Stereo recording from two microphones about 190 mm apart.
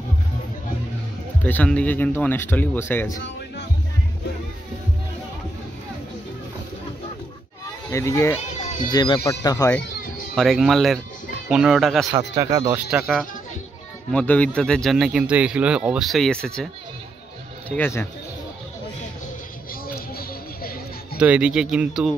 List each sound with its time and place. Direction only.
1.4 s speech: 5° left (ahead or behind)
7.9 s speech: 15° left (ahead or behind)
8.6 s speech: 40° left (ahead or behind)
8.9 s speech: 25° left (ahead or behind)
10.3 s speech: centre (ahead or behind)
12.1 s speech: 20° right (ahead or behind)
12.9 s speech: centre (ahead or behind)
17.6 s speech: 10° left (ahead or behind)
19.7 s a sound: 50° left (ahead or behind)
21.2 s speech: 5° right (ahead or behind)